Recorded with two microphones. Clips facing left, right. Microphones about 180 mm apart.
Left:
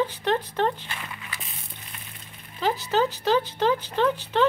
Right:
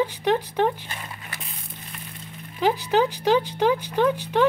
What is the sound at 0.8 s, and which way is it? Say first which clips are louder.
Dog: even; 40° right (ahead or behind).